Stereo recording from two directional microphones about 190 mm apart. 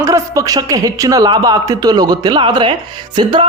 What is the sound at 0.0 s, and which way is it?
Speech, 15° right (ahead or behind).